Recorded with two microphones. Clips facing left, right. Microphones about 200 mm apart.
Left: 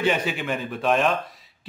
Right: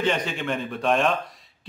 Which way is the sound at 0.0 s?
10° left (ahead or behind).